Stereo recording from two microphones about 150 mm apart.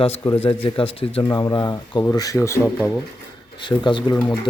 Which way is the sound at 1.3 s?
25° left (ahead or behind).